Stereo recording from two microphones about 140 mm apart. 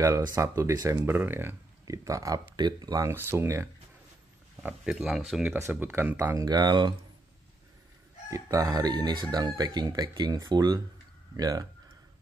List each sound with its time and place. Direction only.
0.0 s speech: 25° right (ahead or behind)
4.6 s speech: 5° right (ahead or behind)
5.5 s speech: 15° right (ahead or behind); by 7.0 s 30° right (ahead or behind)
8.3 s speech: 25° right (ahead or behind)